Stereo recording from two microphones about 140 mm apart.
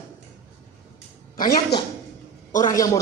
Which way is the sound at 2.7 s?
25° left (ahead or behind).